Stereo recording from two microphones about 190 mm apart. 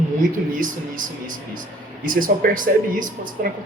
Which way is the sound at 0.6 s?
45° right (ahead or behind).